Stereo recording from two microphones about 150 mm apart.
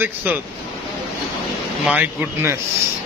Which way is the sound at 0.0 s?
15° right (ahead or behind).